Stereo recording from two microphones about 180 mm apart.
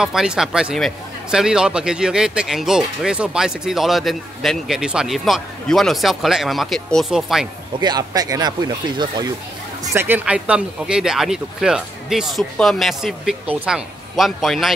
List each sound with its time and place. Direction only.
0.0 s speech: 5° right (ahead or behind)
7.8 s speech: 20° right (ahead or behind)
9.9 s speech: 10° right (ahead or behind)